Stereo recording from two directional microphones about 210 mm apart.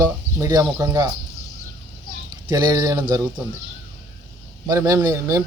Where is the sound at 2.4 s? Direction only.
20° right (ahead or behind).